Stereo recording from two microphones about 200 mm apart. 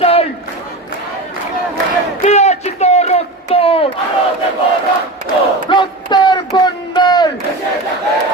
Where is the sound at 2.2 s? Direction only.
35° left (ahead or behind).